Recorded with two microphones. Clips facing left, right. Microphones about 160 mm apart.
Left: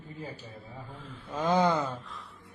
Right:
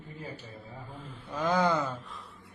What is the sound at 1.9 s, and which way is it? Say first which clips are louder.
Speech: left 1 dB; centre (ahead or behind).